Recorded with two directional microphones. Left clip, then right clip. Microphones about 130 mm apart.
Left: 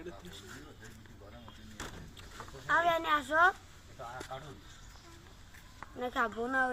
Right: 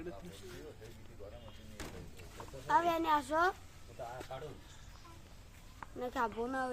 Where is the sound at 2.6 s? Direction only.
15° right (ahead or behind).